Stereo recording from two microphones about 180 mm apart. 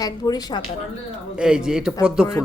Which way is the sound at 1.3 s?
5° right (ahead or behind).